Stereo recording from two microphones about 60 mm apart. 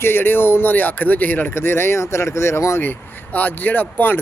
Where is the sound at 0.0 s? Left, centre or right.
Left.